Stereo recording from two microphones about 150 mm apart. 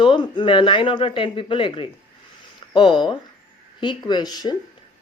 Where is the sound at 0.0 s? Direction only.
35° left (ahead or behind).